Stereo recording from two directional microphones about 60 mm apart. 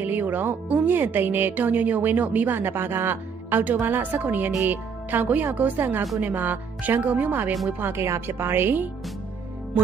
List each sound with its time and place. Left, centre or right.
0.0 s a woman's voice: right
7.8 s speech: right